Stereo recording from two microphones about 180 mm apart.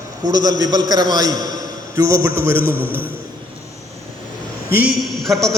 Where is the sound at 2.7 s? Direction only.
10° left (ahead or behind).